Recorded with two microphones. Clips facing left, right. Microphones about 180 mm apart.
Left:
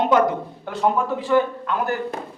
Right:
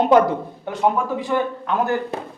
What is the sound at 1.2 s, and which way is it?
Speech, 20° right (ahead or behind).